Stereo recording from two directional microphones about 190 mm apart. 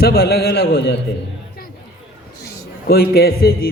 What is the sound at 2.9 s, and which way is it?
Speech, 55° left (ahead or behind).